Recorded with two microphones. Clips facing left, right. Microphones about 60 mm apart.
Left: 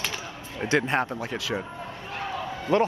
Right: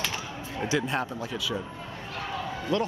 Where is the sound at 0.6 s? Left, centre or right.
Left.